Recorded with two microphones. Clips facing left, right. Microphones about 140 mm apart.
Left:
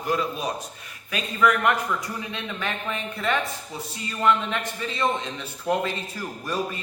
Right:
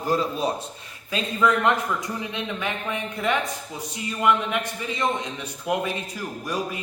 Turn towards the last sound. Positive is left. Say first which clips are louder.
# even
turn(degrees=-10)  # may be behind; listen again after turning